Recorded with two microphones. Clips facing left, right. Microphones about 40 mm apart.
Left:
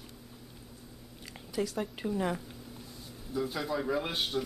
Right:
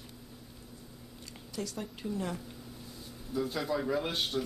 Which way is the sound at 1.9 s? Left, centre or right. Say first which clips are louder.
Left 3 dB; left.